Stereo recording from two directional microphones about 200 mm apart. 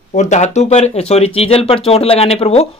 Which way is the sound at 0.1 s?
35° left (ahead or behind).